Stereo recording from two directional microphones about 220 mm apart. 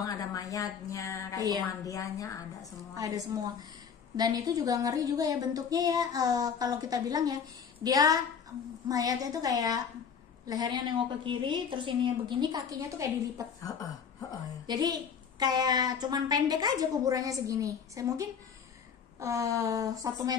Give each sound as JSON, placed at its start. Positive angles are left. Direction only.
{"t": 0.0, "sound": "a woman's voice", "side_deg": 15}
{"t": 3.0, "sound": "a woman's voice", "side_deg": -15}
{"t": 14.7, "sound": "a woman's voice", "side_deg": -20}